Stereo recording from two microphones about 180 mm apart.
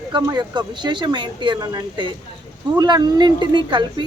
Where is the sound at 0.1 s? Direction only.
25° right (ahead or behind).